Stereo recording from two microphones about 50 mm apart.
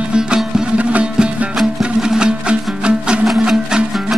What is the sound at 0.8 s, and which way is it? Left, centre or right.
Music, right.